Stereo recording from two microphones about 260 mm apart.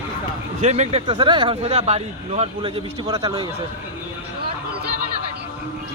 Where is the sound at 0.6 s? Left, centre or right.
Right.